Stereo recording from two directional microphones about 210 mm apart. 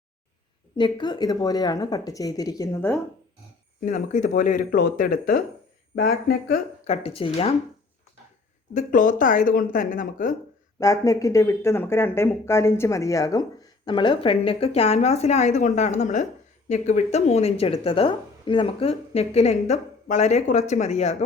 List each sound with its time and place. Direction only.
0.8 s speech: 20° left (ahead or behind)
3.8 s speech: 40° left (ahead or behind)
6.8 s speech: 30° left (ahead or behind)
8.7 s speech: 40° left (ahead or behind)
10.8 s speech: 15° left (ahead or behind); by 21.2 s 30° left (ahead or behind)